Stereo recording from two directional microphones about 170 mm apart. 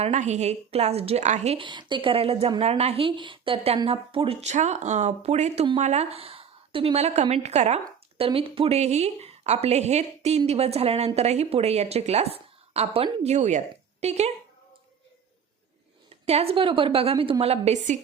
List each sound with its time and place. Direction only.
0.0 s a woman's voice: 45° right (ahead or behind)
16.0 s a woman's voice: 35° right (ahead or behind)